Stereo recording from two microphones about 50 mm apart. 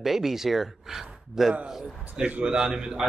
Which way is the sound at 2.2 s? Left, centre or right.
Right.